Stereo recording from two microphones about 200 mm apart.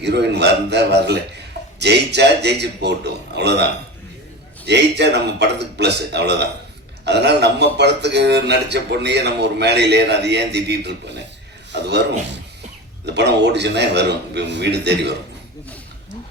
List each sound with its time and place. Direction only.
0.0 s speech: 55° right (ahead or behind)